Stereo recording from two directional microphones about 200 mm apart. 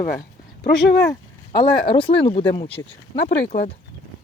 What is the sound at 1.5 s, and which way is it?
Speech, 20° left (ahead or behind).